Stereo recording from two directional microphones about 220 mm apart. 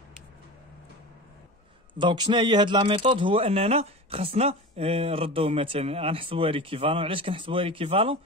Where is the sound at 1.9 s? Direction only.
20° right (ahead or behind).